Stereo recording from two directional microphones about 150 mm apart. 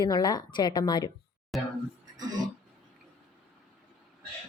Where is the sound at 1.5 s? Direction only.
Centre (ahead or behind).